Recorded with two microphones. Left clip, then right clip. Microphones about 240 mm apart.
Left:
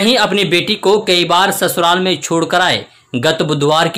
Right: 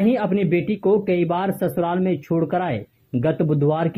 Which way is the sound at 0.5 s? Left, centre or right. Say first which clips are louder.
Left 8 dB; left.